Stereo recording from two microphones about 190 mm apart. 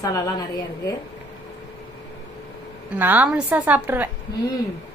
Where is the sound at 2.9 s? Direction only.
10° right (ahead or behind).